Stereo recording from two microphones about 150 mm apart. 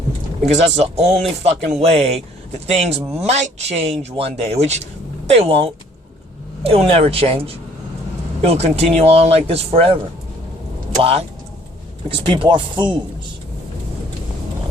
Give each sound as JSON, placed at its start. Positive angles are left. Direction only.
{"t": 0.4, "sound": "speech", "side_deg": -45}
{"t": 11.0, "sound": "speech", "side_deg": -40}